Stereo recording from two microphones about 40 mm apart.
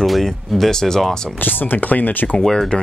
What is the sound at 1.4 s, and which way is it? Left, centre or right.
Speech, left.